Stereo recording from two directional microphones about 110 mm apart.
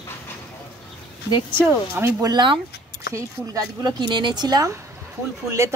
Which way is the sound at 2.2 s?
45° right (ahead or behind).